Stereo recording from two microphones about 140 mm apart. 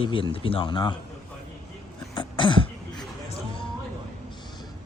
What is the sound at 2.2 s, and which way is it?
Throat clearing, 35° left (ahead or behind).